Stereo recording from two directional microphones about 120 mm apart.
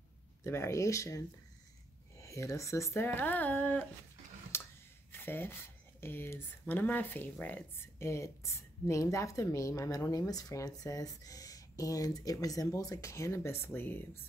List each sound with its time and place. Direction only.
0.4 s speech: 20° left (ahead or behind)
4.5 s a sound: 20° left (ahead or behind)
5.1 s speech: 20° left (ahead or behind)